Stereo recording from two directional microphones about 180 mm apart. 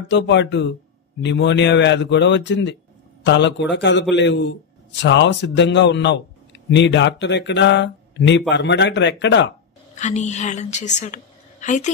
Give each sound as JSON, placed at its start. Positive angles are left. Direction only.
{"t": 0.1, "sound": "a man's voice", "side_deg": 75}
{"t": 9.9, "sound": "a woman's voice", "side_deg": 40}